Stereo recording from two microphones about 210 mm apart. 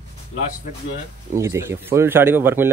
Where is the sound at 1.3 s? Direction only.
15° right (ahead or behind).